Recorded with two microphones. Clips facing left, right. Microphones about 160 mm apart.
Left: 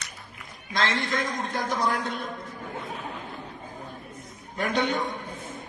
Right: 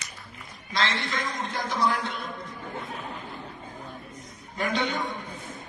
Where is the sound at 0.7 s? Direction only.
50° left (ahead or behind).